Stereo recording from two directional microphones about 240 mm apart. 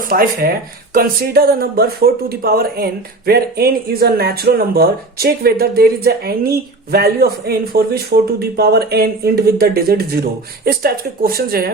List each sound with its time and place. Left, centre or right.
0.1 s speech: right